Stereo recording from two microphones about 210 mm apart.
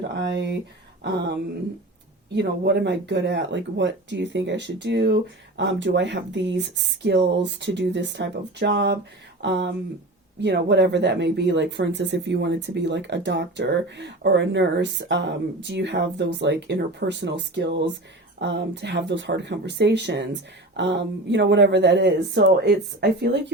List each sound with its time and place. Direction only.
0.2 s speech: 55° right (ahead or behind)